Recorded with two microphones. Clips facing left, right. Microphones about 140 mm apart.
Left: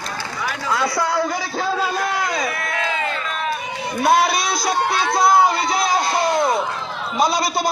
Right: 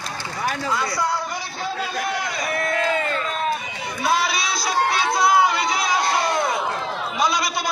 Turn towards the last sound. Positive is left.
turn(degrees=35)  # may be behind; listen again after turning